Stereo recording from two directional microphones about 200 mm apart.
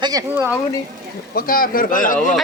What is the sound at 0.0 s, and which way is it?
Speech, 15° right (ahead or behind).